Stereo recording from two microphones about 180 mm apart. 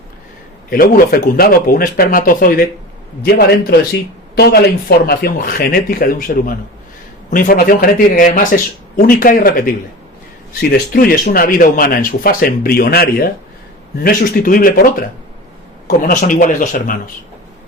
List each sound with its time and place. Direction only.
0.7 s speech: 50° left (ahead or behind)
10.6 s speech: 60° left (ahead or behind)